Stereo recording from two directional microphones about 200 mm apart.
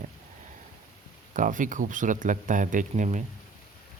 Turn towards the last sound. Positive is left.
turn(degrees=-40)  # may be behind; listen again after turning